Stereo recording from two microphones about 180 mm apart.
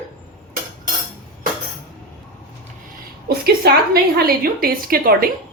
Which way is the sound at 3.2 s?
60° right (ahead or behind).